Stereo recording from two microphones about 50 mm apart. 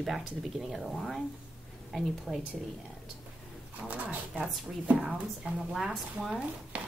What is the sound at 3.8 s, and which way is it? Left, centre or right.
Speech, right.